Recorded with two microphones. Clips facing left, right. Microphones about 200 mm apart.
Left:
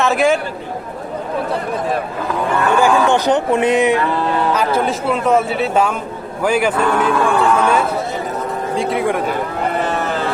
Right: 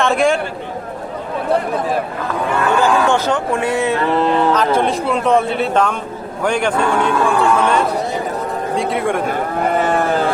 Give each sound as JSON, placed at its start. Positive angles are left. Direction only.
{"t": 0.0, "sound": "a man's voice", "side_deg": 5}
{"t": 2.8, "sound": "speech", "side_deg": 15}
{"t": 4.5, "sound": "a man's voice", "side_deg": 5}